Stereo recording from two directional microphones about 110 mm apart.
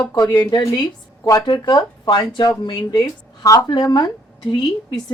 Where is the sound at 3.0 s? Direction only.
30° left (ahead or behind).